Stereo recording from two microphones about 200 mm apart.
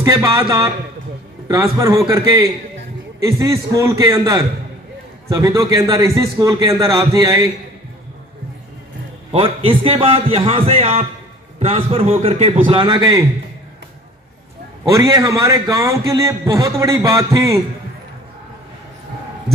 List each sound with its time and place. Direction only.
0.0 s a man's voice: 15° right (ahead or behind)
9.3 s a man's voice: 25° right (ahead or behind)
14.9 s a man's voice: 15° right (ahead or behind)